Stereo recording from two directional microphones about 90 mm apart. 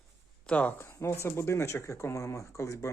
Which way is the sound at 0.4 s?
15° left (ahead or behind).